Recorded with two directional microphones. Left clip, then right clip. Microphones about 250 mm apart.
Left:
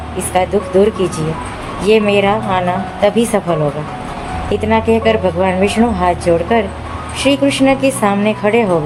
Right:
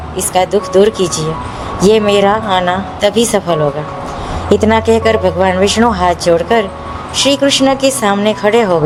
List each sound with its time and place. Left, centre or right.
0.3 s speech: right
4.6 s speech: right